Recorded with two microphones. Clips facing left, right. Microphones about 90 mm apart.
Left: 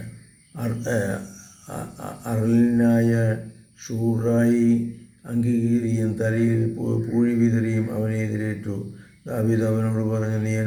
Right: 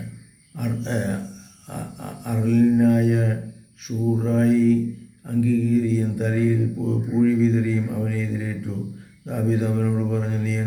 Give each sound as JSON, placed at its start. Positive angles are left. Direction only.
{"t": 0.5, "sound": "mantra", "side_deg": 30}